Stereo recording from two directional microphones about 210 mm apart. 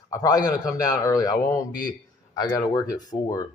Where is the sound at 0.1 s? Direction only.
15° left (ahead or behind).